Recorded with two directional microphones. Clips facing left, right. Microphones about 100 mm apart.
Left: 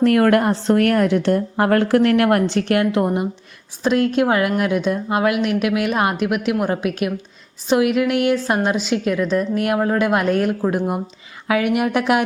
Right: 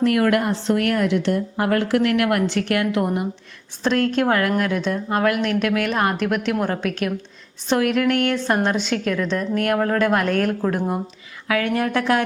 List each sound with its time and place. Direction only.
0.0 s a woman's voice: 45° left (ahead or behind); by 3.2 s 25° left (ahead or behind)
3.8 s a woman's voice: 10° left (ahead or behind)